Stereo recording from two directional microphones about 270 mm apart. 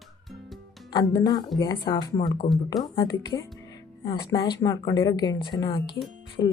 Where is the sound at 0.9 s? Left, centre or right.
Centre.